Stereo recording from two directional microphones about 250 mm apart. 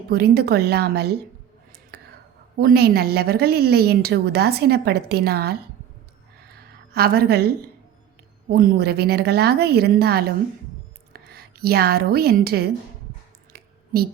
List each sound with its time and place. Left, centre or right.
0.1 s a woman's voice: right
1.9 s whispering: right
2.6 s a woman's voice: right
6.5 s a sound: right
8.4 s a woman's voice: right
13.5 s a sound: right